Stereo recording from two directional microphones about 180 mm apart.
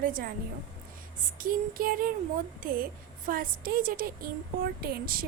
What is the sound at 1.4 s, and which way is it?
A woman's voice, 50° right (ahead or behind).